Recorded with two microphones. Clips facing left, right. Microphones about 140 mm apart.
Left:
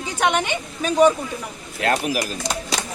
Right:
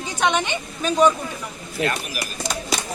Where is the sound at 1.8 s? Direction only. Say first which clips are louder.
Left 5 dB; 85° left.